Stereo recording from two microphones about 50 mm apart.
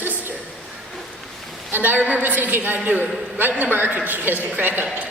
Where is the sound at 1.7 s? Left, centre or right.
Right.